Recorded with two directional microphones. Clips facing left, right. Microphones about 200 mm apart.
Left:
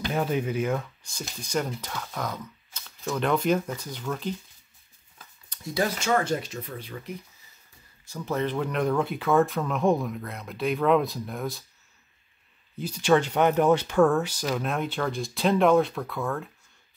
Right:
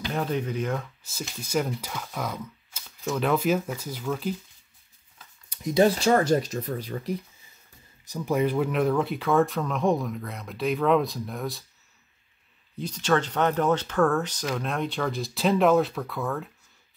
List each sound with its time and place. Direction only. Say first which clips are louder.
0.1 s speech: left 1 dB; 5° left (ahead or behind)
1.0 s speech: right 2 dB; 5° right (ahead or behind)
5.5 s speech: right 7 dB; 20° right (ahead or behind)
5.9 s speech: right 4 dB; 35° right (ahead or behind)
8.1 s speech: right 3 dB; 10° right (ahead or behind)
12.7 s speech: left 3 dB; 10° left (ahead or behind)